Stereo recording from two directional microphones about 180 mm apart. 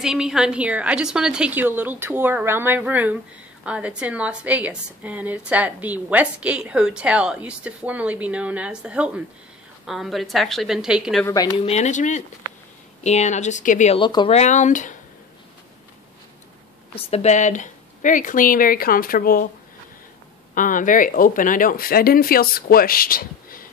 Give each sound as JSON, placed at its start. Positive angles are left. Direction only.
{"t": 0.0, "sound": "a woman's voice", "side_deg": -5}
{"t": 11.5, "sound": "speech", "side_deg": 35}
{"t": 13.9, "sound": "speech", "side_deg": 25}
{"t": 16.9, "sound": "speech", "side_deg": 35}
{"t": 20.5, "sound": "speech", "side_deg": 45}